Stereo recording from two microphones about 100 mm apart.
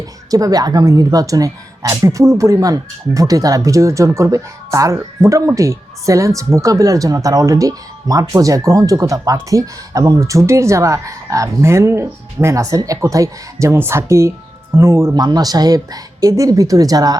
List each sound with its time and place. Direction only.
0.0 s a woman's voice: 35° right (ahead or behind)
15.1 s a woman's voice: 45° right (ahead or behind)